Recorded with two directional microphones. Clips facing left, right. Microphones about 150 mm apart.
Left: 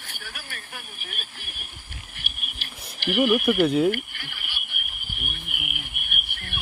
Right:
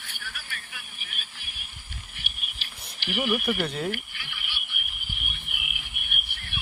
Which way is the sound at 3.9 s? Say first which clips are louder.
Left 8 dB; 50° left (ahead or behind).